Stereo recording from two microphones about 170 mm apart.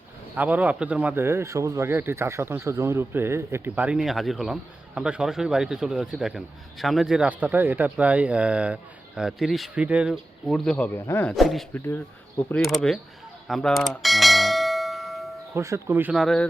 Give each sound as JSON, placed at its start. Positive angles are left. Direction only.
{"t": 0.3, "sound": "speech", "side_deg": -10}
{"t": 13.5, "sound": "bell", "side_deg": 0}
{"t": 15.5, "sound": "speech", "side_deg": -15}
{"t": 16.2, "sound": "speech", "side_deg": 5}